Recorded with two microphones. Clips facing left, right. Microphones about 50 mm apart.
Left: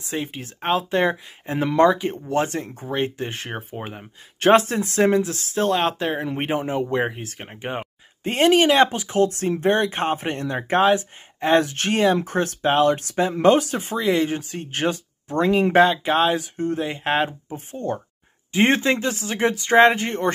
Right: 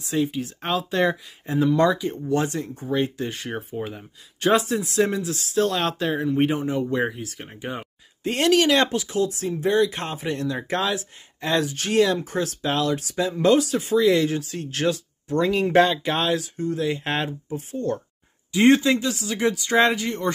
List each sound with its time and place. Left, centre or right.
0.0 s speech: left
9.2 s speech: left
11.6 s speech: left
11.9 s speech: left
12.2 s speech: left
15.8 s speech: centre
16.3 s speech: left
17.0 s speech: centre
18.5 s speech: left